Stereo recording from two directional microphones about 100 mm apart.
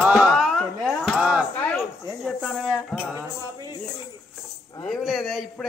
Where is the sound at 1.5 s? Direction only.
25° left (ahead or behind).